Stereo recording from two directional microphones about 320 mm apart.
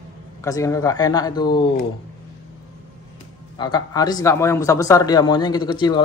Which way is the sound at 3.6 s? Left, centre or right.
Centre.